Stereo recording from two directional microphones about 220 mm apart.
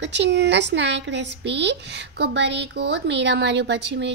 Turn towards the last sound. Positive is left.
turn(degrees=-55)  # may be behind; listen again after turning